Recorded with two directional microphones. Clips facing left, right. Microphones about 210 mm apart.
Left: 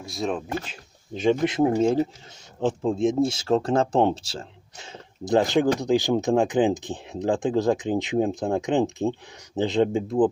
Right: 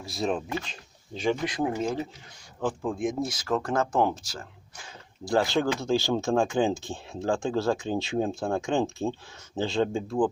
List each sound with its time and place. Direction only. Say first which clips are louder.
0.0 s speech: left 1 dB; centre (ahead or behind)
1.1 s speech: left 6 dB; 20° left (ahead or behind)